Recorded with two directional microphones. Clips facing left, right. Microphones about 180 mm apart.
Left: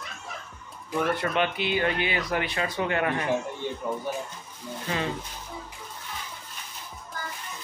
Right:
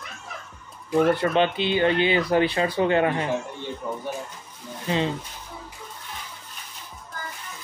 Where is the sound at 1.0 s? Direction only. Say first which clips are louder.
Right 6 dB; 30° right (ahead or behind).